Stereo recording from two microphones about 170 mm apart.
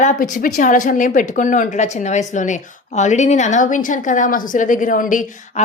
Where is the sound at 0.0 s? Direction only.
45° left (ahead or behind).